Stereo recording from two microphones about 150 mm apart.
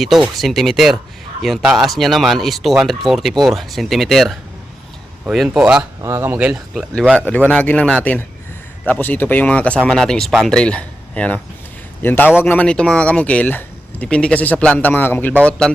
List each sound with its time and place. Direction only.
0.0 s speech: centre (ahead or behind)
6.0 s speech: 15° right (ahead or behind); by 15.7 s 5° left (ahead or behind)